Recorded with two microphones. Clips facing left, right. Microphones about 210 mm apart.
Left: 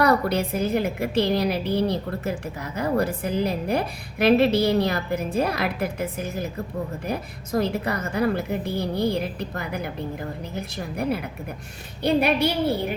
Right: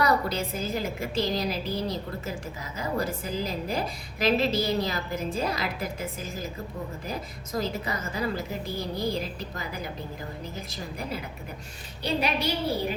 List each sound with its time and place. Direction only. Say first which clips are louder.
0.0 s a woman's voice: left 5 dB; 60° left (ahead or behind)